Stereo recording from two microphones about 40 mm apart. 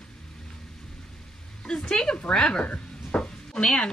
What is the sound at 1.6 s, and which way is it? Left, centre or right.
Speech, left.